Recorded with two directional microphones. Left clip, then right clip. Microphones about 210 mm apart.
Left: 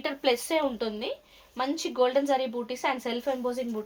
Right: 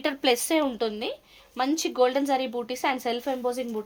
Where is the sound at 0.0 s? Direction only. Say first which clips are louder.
Right 3 dB; 50° right (ahead or behind).